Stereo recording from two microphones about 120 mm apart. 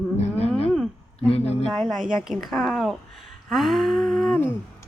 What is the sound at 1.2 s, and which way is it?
Speech, 60° left (ahead or behind).